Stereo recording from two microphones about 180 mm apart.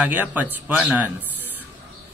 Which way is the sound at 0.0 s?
10° right (ahead or behind).